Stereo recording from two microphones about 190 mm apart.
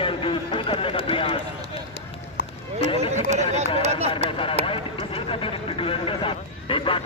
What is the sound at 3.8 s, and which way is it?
Speech, 35° right (ahead or behind).